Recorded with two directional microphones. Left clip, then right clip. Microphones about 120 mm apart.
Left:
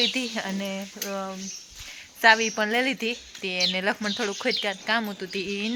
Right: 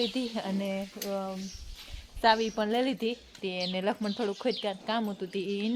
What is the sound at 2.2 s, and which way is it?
Speech, 10° left (ahead or behind).